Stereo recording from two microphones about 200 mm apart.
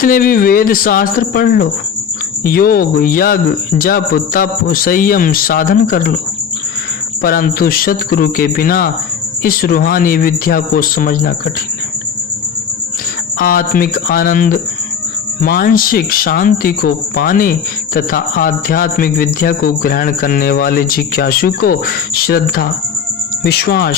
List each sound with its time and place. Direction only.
0.0 s speech: 45° left (ahead or behind)
7.2 s speech: 45° left (ahead or behind)
13.4 s speech: 50° left (ahead or behind)